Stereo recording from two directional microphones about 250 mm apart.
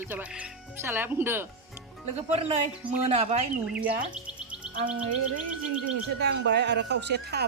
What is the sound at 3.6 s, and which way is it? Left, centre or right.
Speech, centre.